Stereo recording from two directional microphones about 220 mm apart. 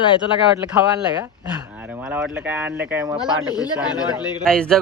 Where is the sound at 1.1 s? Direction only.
15° right (ahead or behind).